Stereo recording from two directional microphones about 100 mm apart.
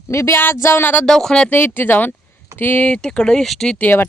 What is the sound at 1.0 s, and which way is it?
Speech, 5° left (ahead or behind).